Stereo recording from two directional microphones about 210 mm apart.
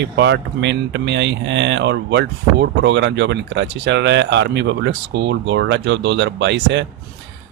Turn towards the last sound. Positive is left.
turn(degrees=-60)  # may be behind; listen again after turning